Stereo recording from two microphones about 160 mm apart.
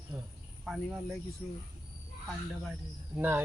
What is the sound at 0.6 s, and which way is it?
Speech, centre (ahead or behind).